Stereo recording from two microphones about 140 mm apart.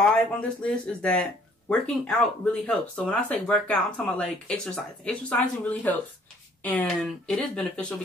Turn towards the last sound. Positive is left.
turn(degrees=5)  # may be behind; listen again after turning